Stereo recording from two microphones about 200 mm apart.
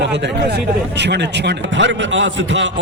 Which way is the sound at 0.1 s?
60° right (ahead or behind).